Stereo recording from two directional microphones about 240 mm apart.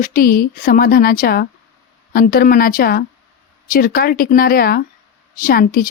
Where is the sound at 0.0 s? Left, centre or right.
Left.